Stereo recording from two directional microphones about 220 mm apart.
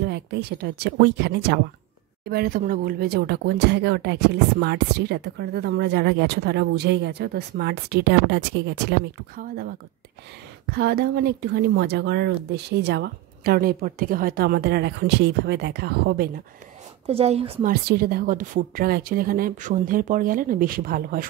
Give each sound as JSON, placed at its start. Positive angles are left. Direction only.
{"t": 0.0, "sound": "speech", "side_deg": -50}
{"t": 17.0, "sound": "a woman's voice", "side_deg": -30}
{"t": 17.6, "sound": "a woman's voice", "side_deg": -45}